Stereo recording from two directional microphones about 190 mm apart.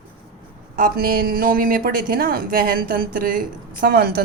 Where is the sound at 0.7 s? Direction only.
50° right (ahead or behind).